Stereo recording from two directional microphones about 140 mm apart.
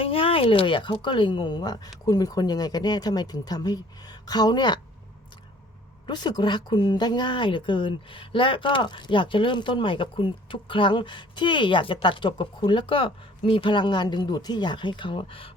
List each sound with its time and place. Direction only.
0.0 s speech: 40° left (ahead or behind)
6.1 s speech: 30° left (ahead or behind)